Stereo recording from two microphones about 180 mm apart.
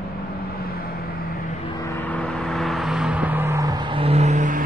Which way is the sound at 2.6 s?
Centre (ahead or behind).